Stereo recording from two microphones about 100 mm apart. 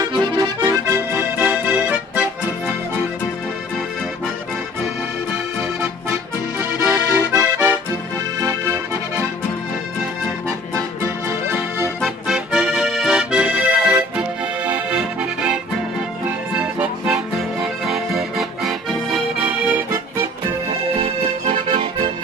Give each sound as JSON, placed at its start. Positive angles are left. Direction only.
{"t": 0.0, "sound": "accordion", "side_deg": -45}
{"t": 0.8, "sound": "music", "side_deg": -25}
{"t": 6.9, "sound": "accordion", "side_deg": -20}
{"t": 8.4, "sound": "accordion", "side_deg": -30}
{"t": 10.7, "sound": "accordion", "side_deg": -30}
{"t": 12.0, "sound": "accordion", "side_deg": -5}
{"t": 21.0, "sound": "accordion", "side_deg": -60}